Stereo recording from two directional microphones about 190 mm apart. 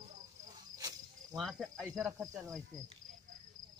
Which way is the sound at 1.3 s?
Centre (ahead or behind).